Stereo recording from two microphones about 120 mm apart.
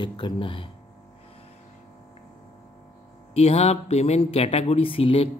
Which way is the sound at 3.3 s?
60° left (ahead or behind).